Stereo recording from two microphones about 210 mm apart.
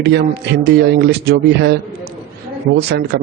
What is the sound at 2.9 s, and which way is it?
Speech, 50° right (ahead or behind).